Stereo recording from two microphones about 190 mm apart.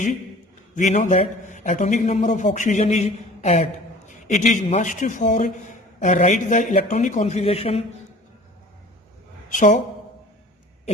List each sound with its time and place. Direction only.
0.8 s a man's voice: 40° left (ahead or behind)
9.5 s speech: 40° left (ahead or behind)